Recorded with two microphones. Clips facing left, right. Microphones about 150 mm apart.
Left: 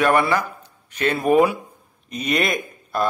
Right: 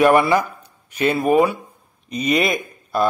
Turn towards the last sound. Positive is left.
turn(degrees=0)  # may be behind; listen again after turning